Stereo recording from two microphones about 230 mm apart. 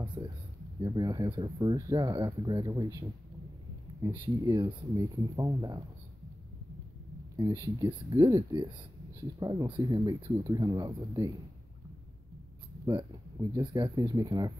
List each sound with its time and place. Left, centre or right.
0.7 s speech: centre
7.3 s speech: centre
12.8 s speech: centre